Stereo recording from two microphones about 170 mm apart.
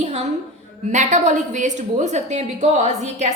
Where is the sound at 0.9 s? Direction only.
45° right (ahead or behind).